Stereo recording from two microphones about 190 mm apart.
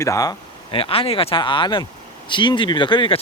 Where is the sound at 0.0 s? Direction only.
15° left (ahead or behind).